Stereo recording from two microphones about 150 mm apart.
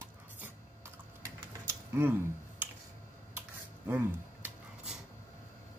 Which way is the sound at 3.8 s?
15° right (ahead or behind).